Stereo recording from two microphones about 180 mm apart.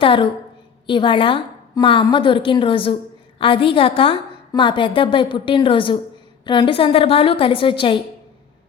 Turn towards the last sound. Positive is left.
turn(degrees=30)  # may be behind; listen again after turning